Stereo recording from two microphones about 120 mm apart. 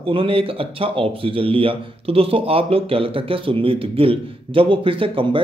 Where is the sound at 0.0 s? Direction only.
50° right (ahead or behind).